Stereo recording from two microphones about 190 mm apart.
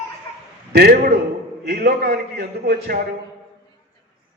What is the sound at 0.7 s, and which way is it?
A man's voice, 55° right (ahead or behind).